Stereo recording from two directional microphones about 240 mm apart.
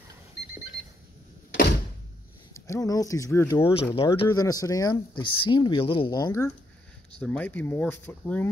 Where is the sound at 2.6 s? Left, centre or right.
Centre.